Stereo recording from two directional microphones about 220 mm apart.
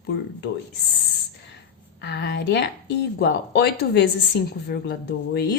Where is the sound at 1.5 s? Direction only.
50° left (ahead or behind).